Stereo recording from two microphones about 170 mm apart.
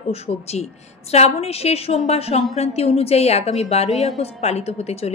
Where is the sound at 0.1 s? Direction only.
40° left (ahead or behind).